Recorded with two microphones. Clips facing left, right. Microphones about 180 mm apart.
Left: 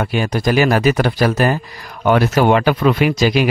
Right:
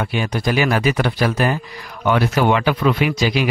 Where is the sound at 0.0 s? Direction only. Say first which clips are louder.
Left 3 dB; 45° left (ahead or behind).